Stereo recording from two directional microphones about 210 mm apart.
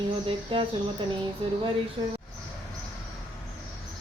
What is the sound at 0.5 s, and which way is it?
Mantra, 25° right (ahead or behind).